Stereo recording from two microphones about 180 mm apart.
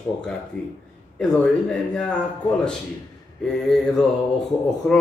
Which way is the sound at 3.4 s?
Centre (ahead or behind).